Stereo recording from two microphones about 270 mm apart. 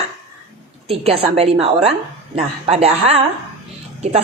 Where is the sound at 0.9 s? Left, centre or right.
Right.